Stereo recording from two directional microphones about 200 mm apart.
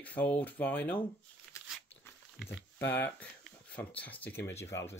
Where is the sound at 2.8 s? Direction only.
10° left (ahead or behind).